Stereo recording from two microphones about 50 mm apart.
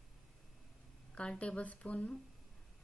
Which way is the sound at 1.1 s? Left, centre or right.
Left.